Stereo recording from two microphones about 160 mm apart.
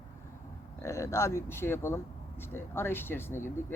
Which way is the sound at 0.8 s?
20° left (ahead or behind).